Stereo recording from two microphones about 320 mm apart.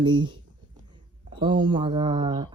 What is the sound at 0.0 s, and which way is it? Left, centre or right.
Speech, centre.